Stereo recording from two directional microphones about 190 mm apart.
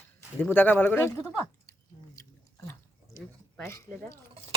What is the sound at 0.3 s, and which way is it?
Speech, 10° left (ahead or behind).